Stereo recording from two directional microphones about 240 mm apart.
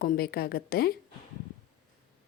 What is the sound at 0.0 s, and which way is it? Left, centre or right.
Speech, left.